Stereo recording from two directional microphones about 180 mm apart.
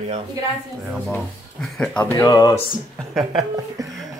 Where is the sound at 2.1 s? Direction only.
20° left (ahead or behind).